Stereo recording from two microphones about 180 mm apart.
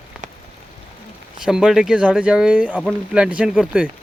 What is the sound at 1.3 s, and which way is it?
Speech, 5° right (ahead or behind).